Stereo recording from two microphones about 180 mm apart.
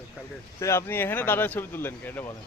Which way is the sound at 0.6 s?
15° left (ahead or behind).